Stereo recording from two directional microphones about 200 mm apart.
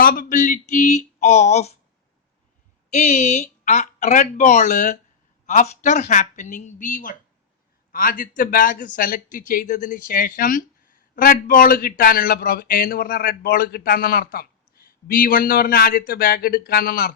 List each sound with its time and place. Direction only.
0.0 s speech: 45° left (ahead or behind)
2.9 s a woman's voice: 35° left (ahead or behind)